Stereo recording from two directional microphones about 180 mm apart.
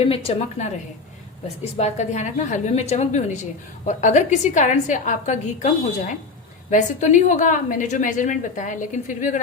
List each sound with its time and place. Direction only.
0.0 s a woman's voice: 30° left (ahead or behind)
1.7 s a woman's voice: 40° left (ahead or behind)